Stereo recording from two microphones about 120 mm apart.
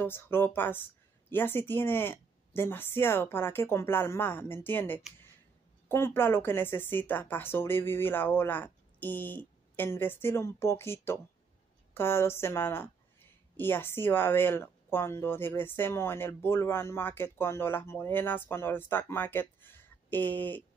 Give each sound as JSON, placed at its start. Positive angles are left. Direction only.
{"t": 0.0, "sound": "speech", "side_deg": 20}